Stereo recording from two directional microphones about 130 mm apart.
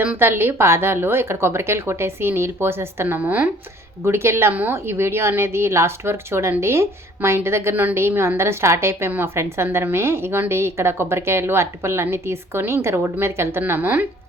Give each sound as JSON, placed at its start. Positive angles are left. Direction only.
{"t": 0.0, "sound": "a woman's voice", "side_deg": -15}